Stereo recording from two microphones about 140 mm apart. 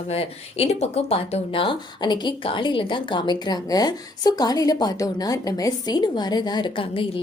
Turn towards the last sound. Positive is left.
turn(degrees=35)  # may be behind; listen again after turning